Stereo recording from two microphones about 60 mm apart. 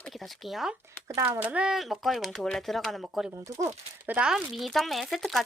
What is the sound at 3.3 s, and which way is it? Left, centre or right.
Speech, right.